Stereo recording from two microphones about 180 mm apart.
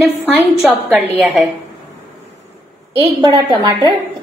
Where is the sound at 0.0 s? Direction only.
5° right (ahead or behind).